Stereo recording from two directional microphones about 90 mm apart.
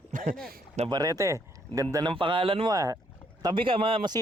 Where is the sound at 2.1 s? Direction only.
70° right (ahead or behind); by 2.6 s 90° right.